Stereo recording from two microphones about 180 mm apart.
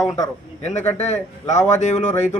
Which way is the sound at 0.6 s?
40° left (ahead or behind).